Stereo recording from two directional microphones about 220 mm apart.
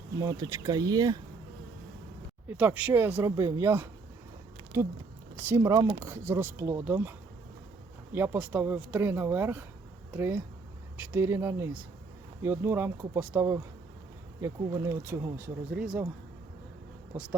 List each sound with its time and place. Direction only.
0.2 s speech: 15° right (ahead or behind)
2.5 s speech: 5° right (ahead or behind)
8.1 s speech: 10° right (ahead or behind)
17.1 s speech: 10° right (ahead or behind)